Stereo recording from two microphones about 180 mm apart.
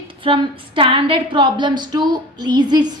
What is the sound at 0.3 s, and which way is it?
A woman's voice, 30° right (ahead or behind).